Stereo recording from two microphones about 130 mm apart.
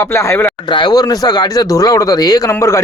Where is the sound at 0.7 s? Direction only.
35° left (ahead or behind).